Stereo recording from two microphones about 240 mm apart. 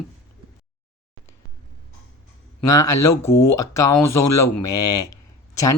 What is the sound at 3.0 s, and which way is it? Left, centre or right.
Speech, centre.